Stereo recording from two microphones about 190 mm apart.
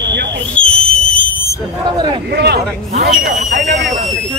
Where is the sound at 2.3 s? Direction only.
60° right (ahead or behind).